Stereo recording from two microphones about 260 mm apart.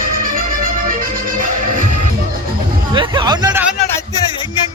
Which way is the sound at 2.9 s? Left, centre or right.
Centre.